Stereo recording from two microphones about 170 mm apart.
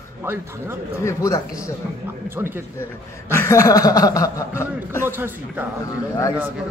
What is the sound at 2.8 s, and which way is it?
Speech, 15° left (ahead or behind).